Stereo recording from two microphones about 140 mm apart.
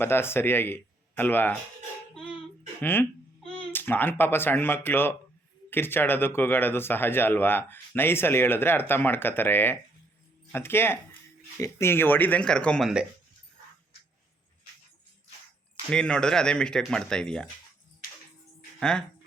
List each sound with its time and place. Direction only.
0.0 s speech: 15° left (ahead or behind)
2.1 s music: 5° left (ahead or behind)
2.8 s babbling: 15° left (ahead or behind)
3.7 s speech: 15° left (ahead or behind)
15.9 s speech: 5° left (ahead or behind)
18.8 s speech: 5° left (ahead or behind)